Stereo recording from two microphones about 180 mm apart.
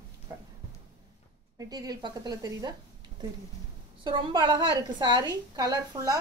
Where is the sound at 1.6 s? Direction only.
20° right (ahead or behind).